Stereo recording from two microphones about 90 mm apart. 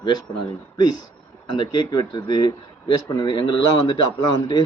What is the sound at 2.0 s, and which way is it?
Speech, 55° left (ahead or behind).